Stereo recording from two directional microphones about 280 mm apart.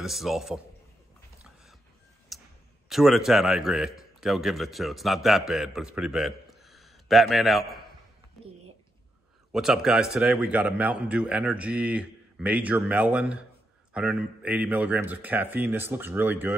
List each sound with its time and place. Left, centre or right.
0.0 s a man's voice: centre
1.4 s a sound: centre
2.3 s clicking: centre
2.9 s a man's voice: centre
9.5 s a man's voice: centre